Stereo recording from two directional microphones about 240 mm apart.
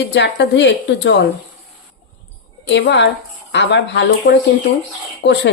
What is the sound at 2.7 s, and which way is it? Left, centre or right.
Speech, left.